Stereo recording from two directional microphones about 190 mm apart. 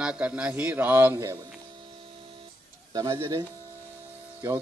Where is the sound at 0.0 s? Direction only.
5° right (ahead or behind).